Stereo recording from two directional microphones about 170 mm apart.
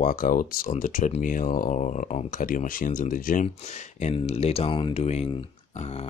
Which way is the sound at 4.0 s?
35° left (ahead or behind).